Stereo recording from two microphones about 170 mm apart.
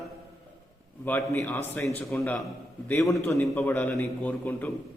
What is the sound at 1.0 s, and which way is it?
A man's voice, 10° left (ahead or behind).